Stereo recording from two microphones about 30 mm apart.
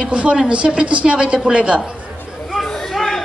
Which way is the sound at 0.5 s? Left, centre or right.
Right.